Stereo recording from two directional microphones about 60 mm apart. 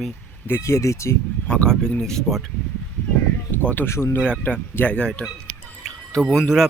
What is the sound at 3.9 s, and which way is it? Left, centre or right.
Speech, left.